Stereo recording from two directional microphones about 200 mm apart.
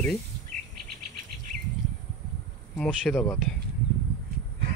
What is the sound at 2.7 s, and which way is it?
Speech, 5° left (ahead or behind).